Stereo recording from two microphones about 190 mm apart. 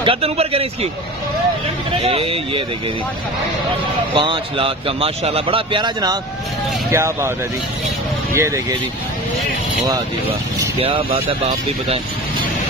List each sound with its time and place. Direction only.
0.0 s speech: 30° right (ahead or behind)
2.0 s a man's voice: 30° right (ahead or behind)
4.1 s a man's voice: 30° right (ahead or behind)
10.8 s speech: 30° right (ahead or behind)